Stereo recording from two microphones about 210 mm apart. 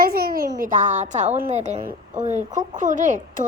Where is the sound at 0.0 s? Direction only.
45° right (ahead or behind).